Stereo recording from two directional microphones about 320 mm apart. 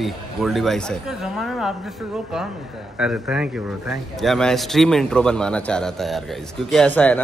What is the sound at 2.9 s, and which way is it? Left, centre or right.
A man's voice, centre.